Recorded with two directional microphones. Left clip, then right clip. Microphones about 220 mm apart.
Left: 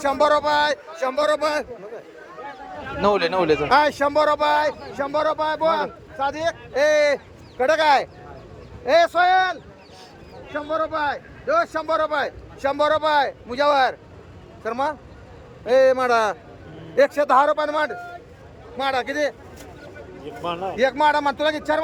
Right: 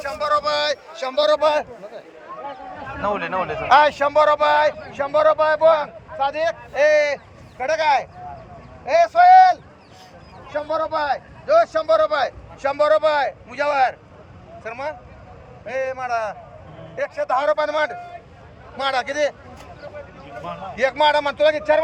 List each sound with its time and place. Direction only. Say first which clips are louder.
0.0 s a man's voice: left 3 dB; 30° left (ahead or behind)
3.0 s a man's voice: left 4 dB; 60° left (ahead or behind)
3.7 s a man's voice: right 8 dB; 20° left (ahead or behind)
20.7 s a man's voice: right 2 dB; 15° left (ahead or behind)